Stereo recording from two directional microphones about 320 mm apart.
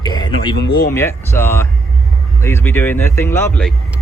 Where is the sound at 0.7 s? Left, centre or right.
Left.